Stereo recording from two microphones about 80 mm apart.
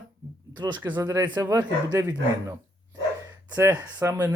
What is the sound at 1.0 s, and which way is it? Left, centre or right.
Speech, right.